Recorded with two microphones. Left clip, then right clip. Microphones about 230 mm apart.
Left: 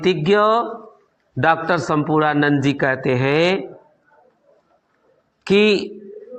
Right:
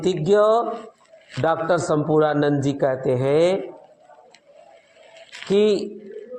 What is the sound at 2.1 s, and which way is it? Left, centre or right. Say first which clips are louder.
A man's voice: left 2 dB; left.